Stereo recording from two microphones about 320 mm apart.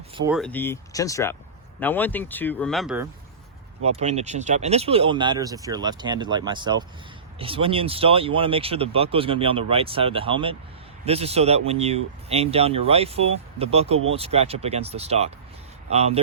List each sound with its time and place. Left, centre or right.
0.2 s speech: centre
3.8 s speech: centre